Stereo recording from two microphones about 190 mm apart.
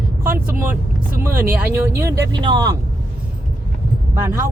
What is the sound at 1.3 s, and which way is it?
Speech, 50° right (ahead or behind).